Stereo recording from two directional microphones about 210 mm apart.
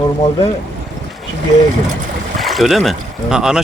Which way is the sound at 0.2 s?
20° left (ahead or behind).